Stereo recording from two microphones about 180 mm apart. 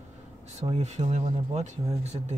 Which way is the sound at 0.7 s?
35° right (ahead or behind).